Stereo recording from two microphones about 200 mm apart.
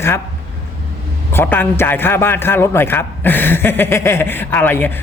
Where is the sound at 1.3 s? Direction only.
10° left (ahead or behind).